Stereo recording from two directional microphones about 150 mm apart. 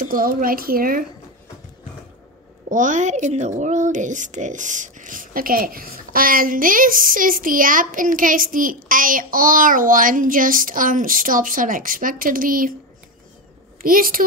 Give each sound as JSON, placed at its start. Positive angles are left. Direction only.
{"t": 0.0, "sound": "speech", "side_deg": -70}
{"t": 2.7, "sound": "speech", "side_deg": -55}
{"t": 13.8, "sound": "speech", "side_deg": -70}